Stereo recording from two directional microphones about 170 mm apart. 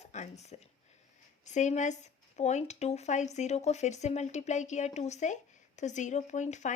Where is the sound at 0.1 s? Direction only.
40° left (ahead or behind).